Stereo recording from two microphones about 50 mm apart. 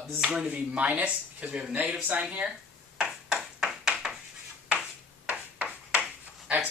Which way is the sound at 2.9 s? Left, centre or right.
Centre.